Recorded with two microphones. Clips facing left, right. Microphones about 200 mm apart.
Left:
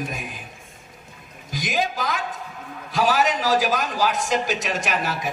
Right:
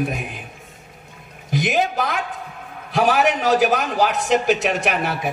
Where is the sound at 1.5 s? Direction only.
65° right (ahead or behind).